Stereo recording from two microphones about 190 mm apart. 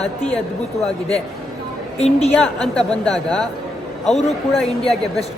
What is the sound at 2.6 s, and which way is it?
Speech, 5° left (ahead or behind).